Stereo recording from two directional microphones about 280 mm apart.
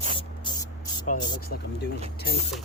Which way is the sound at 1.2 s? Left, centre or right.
Centre.